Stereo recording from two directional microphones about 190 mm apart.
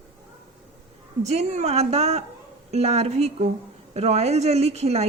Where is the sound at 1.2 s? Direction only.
35° right (ahead or behind).